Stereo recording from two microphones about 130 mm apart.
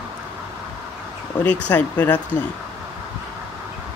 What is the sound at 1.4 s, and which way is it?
Speech, 10° left (ahead or behind).